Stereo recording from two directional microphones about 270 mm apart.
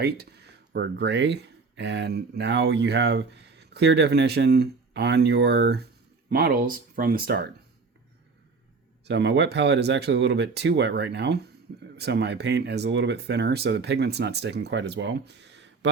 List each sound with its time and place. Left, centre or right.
0.0 s speech: right
9.0 s speech: right